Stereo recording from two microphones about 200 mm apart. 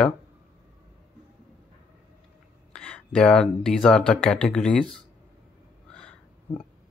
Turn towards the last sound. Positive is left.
turn(degrees=5)  # may be behind; listen again after turning